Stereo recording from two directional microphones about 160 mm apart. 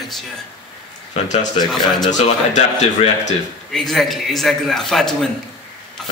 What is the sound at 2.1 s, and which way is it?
Speech, 50° left (ahead or behind).